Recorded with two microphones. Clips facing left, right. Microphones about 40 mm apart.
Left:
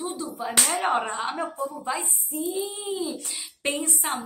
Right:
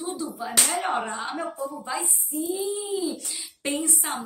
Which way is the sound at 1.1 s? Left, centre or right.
Left.